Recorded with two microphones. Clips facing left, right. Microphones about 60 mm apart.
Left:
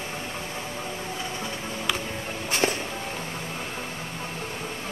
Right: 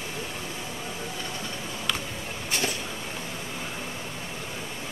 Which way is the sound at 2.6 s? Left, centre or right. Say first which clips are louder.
Left 7 dB; left.